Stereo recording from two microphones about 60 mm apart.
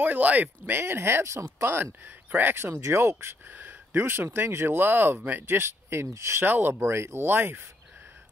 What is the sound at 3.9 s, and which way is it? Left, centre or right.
Speech, right.